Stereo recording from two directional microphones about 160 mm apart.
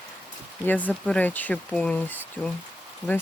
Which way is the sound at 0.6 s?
10° left (ahead or behind).